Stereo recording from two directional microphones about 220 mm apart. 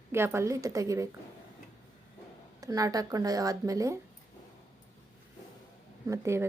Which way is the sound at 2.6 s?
15° right (ahead or behind).